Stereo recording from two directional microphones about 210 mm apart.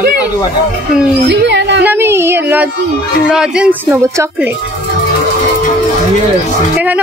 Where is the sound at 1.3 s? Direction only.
55° right (ahead or behind).